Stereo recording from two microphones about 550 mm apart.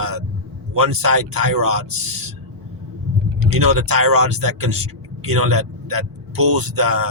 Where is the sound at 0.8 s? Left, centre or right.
Right.